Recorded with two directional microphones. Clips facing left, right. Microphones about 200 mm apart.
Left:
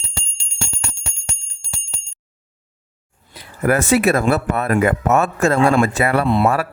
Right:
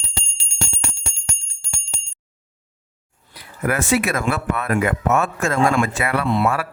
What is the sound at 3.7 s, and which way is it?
Speech, 40° left (ahead or behind).